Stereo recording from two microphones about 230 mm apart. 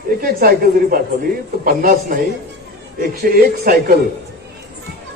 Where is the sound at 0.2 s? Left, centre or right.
Right.